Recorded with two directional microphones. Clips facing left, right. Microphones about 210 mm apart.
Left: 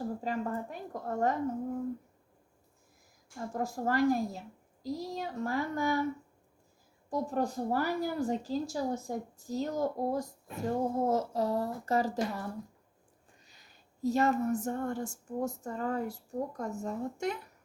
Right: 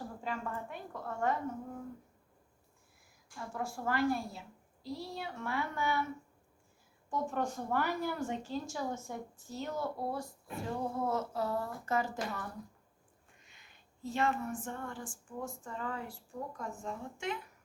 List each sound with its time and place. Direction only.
0.2 s a woman's voice: 40° left (ahead or behind)
3.3 s a woman's voice: 40° left (ahead or behind)
7.1 s a woman's voice: 35° left (ahead or behind)